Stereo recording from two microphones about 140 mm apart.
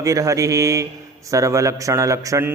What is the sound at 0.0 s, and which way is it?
Speech, 25° right (ahead or behind).